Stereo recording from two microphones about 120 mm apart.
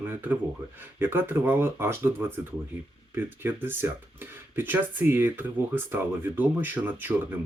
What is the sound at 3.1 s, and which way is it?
Speech, 15° right (ahead or behind).